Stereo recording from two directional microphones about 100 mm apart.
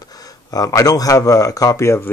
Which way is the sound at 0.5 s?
35° left (ahead or behind).